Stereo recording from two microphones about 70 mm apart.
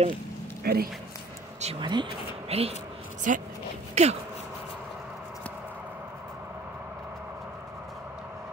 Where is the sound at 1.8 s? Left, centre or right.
Right.